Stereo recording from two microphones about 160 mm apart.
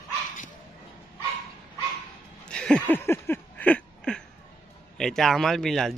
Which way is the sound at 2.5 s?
5° left (ahead or behind).